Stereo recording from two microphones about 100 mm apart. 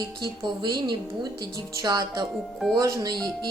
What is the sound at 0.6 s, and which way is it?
A woman's voice, 50° right (ahead or behind).